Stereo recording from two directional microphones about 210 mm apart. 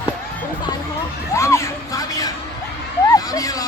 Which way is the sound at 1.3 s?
15° left (ahead or behind).